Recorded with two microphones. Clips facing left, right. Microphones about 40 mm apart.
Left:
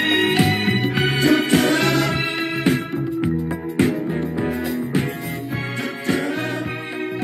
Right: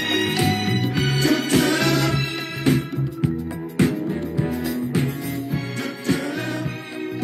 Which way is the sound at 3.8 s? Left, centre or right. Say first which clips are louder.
Left 1 dB; centre.